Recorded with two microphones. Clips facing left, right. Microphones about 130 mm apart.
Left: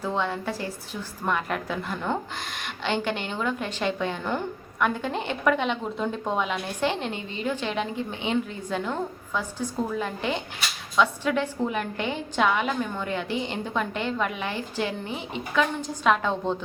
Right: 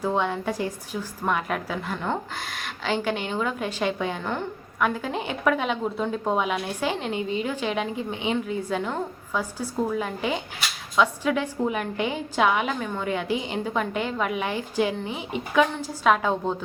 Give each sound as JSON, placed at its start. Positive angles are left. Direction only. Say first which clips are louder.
{"t": 0.0, "sound": "a woman's voice", "louder": "right 3 dB", "side_deg": -15}
{"t": 4.3, "sound": "a woman's voice", "louder": "left 1 dB", "side_deg": 0}